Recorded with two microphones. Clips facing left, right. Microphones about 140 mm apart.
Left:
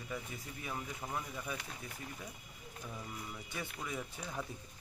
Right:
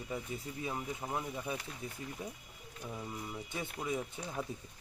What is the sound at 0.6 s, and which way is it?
Speech, 25° right (ahead or behind).